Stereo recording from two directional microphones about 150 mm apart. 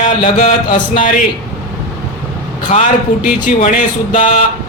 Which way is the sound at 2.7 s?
45° left (ahead or behind).